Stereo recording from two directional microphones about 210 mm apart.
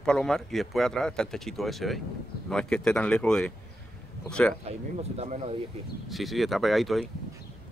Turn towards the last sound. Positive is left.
turn(degrees=0)  # may be behind; listen again after turning